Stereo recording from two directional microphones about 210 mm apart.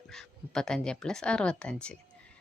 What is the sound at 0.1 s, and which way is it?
A woman's voice, centre (ahead or behind).